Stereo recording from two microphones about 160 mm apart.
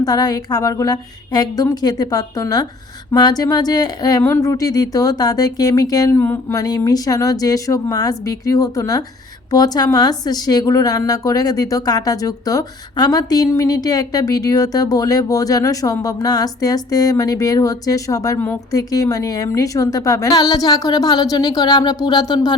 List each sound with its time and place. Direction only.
0.0 s speech: 25° left (ahead or behind)